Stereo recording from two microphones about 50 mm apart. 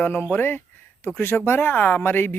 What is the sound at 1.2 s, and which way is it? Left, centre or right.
Speech, left.